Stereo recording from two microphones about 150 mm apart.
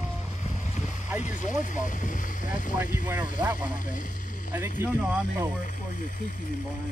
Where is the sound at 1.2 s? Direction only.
55° left (ahead or behind).